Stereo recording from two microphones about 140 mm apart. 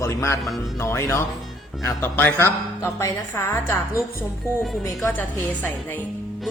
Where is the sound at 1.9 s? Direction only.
15° left (ahead or behind).